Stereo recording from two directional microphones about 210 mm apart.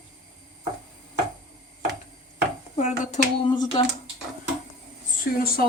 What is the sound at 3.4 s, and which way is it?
Speech, 25° left (ahead or behind).